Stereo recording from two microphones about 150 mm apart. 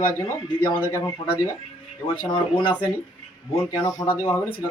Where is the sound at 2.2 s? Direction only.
35° left (ahead or behind).